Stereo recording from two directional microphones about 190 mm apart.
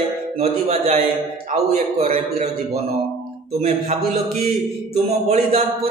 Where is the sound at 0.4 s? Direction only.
35° right (ahead or behind).